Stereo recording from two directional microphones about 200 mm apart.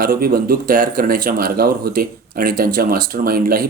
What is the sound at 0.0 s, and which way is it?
Speech, 45° right (ahead or behind).